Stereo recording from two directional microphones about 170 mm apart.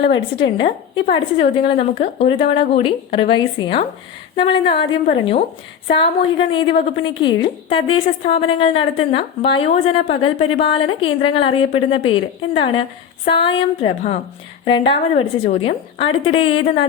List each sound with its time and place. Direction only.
0.0 s speech: 90° left
0.4 s a woman's voice: 30° left (ahead or behind)
6.5 s a woman's voice: 30° left (ahead or behind)